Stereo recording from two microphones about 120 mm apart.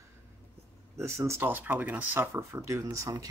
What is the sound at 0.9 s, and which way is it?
Speech, 25° right (ahead or behind).